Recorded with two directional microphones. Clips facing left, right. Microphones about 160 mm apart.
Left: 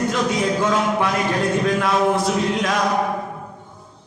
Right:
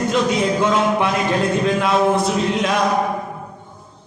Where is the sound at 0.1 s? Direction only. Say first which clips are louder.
Right 3 dB; 20° right (ahead or behind).